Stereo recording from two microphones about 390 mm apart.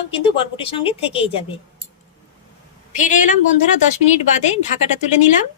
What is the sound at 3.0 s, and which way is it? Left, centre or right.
Speech, centre.